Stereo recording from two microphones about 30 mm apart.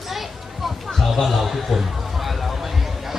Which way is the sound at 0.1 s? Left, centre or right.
Centre.